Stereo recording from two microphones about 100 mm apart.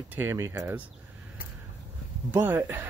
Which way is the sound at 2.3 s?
20° right (ahead or behind).